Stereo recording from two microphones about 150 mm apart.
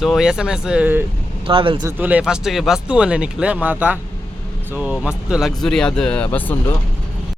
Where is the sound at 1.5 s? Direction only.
35° right (ahead or behind).